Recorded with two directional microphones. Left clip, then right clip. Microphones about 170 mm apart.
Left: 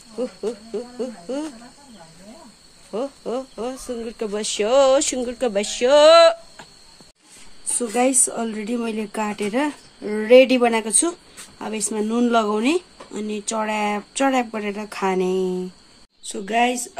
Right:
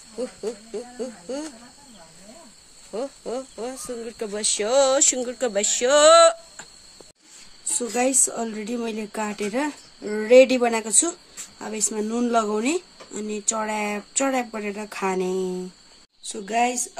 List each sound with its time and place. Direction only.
0.2 s speech: 5° left (ahead or behind)
2.9 s speech: 5° left (ahead or behind)
7.8 s a woman's voice: 10° right (ahead or behind)